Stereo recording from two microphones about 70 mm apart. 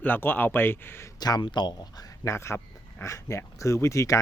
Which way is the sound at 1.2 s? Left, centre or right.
Left.